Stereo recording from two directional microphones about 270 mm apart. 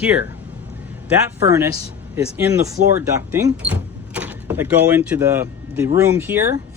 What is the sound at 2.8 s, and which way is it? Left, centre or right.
Speech, right.